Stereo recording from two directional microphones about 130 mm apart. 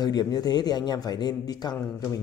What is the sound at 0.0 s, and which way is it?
Speech, 30° left (ahead or behind).